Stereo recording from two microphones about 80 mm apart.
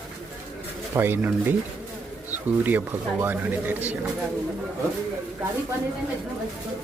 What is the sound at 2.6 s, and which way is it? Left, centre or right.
Speech, right.